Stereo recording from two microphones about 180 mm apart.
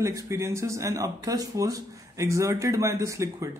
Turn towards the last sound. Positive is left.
turn(degrees=-15)  # may be behind; listen again after turning